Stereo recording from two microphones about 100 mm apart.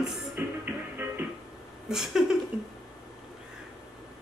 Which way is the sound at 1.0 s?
20° right (ahead or behind).